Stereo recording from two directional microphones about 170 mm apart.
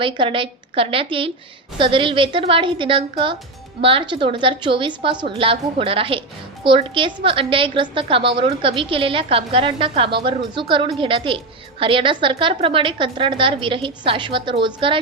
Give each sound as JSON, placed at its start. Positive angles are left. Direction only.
{"t": 0.0, "sound": "a woman's voice", "side_deg": -30}